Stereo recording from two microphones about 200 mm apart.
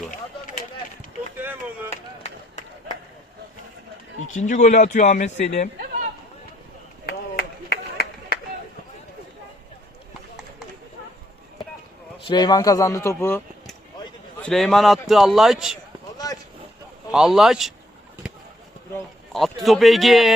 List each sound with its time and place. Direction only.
1.4 s chop: 10° right (ahead or behind)
2.2 s run: 35° left (ahead or behind)
4.4 s speech: 35° left (ahead or behind)
7.0 s run: 50° left (ahead or behind)
12.3 s a man's voice: 20° left (ahead or behind); by 15.8 s centre (ahead or behind)
16.1 s a sound: 20° left (ahead or behind)
17.1 s a man's voice: 5° right (ahead or behind)
18.2 s a sound: 5° right (ahead or behind)
19.6 s a man's voice: centre (ahead or behind)